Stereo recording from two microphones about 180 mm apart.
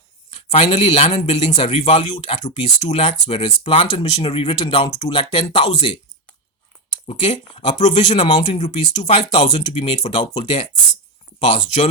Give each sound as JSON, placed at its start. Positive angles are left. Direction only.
{"t": 0.3, "sound": "a man's voice", "side_deg": 35}
{"t": 7.1, "sound": "a man's voice", "side_deg": 30}
{"t": 8.1, "sound": "speech", "side_deg": 25}
{"t": 11.5, "sound": "a man's voice", "side_deg": 40}